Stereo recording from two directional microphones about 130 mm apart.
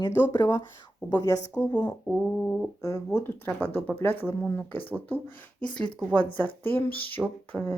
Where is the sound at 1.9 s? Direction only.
15° left (ahead or behind).